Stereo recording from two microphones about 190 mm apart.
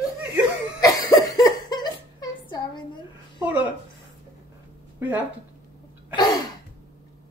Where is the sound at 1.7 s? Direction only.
20° left (ahead or behind).